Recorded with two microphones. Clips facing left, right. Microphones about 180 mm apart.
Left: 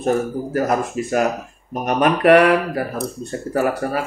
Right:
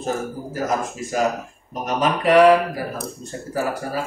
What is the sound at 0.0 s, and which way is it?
Speech, 60° left (ahead or behind).